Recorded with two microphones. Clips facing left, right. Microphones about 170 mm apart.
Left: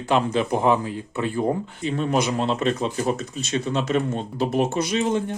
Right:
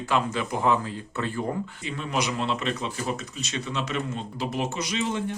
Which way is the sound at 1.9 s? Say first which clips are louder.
Left 6 dB; 40° left (ahead or behind).